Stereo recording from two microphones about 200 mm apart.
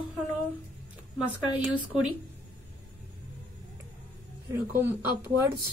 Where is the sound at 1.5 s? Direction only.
5° right (ahead or behind).